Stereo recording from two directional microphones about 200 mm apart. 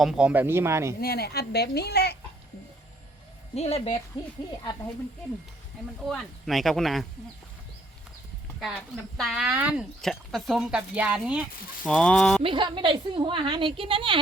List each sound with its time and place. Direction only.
0.0 s speech: 5° right (ahead or behind)
1.0 s speech: 50° left (ahead or behind)
3.5 s speech: 30° left (ahead or behind)
6.1 s speech: centre (ahead or behind)
8.6 s speech: centre (ahead or behind)
12.4 s a woman's voice: 25° right (ahead or behind)